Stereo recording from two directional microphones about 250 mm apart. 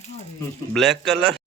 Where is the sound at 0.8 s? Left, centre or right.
Centre.